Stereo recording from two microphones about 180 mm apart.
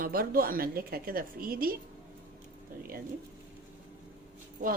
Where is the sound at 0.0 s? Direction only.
55° right (ahead or behind).